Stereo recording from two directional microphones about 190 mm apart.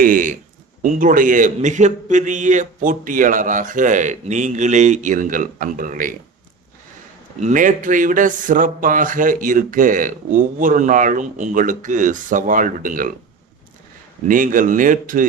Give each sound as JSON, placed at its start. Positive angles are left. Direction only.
{"t": 0.0, "sound": "a man's voice", "side_deg": -45}
{"t": 7.3, "sound": "a man's voice", "side_deg": -40}
{"t": 14.3, "sound": "a man's voice", "side_deg": -45}